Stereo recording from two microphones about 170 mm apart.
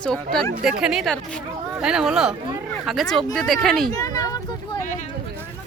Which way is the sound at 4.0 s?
20° left (ahead or behind).